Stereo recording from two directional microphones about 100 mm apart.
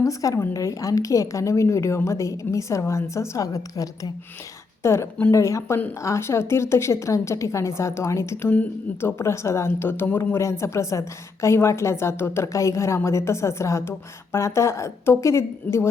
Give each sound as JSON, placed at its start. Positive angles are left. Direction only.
{"t": 0.0, "sound": "a woman's voice", "side_deg": 35}